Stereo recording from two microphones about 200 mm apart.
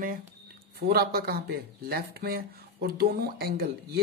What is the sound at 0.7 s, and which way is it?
Speech, 50° right (ahead or behind).